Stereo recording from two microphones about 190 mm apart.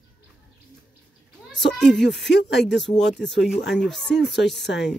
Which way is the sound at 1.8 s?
5° left (ahead or behind).